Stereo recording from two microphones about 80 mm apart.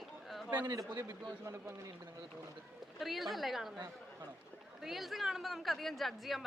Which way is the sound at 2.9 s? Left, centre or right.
Centre.